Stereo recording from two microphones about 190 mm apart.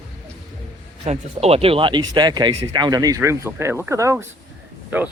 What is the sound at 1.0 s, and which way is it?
Speech, 35° right (ahead or behind).